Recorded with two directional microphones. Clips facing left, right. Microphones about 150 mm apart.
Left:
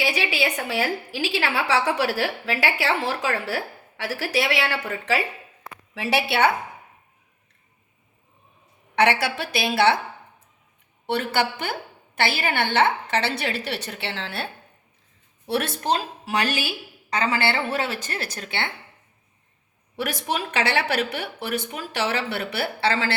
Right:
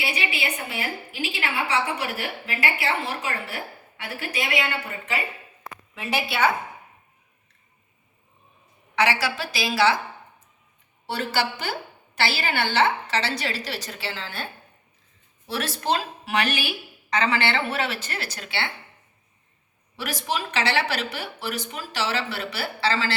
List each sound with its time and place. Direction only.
0.3 s a woman's voice: 90° left
5.9 s a woman's voice: 80° left
9.0 s speech: 55° left (ahead or behind)
11.0 s a woman's voice: 55° left (ahead or behind)
15.4 s speech: 55° left (ahead or behind)
16.2 s a woman's voice: 40° left (ahead or behind)
20.0 s speech: 55° left (ahead or behind)